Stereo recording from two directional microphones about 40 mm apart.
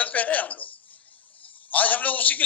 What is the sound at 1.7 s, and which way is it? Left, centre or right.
Speech, left.